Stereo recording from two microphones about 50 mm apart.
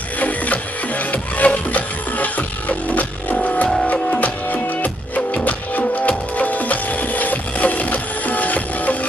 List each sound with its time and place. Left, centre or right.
0.2 s music: left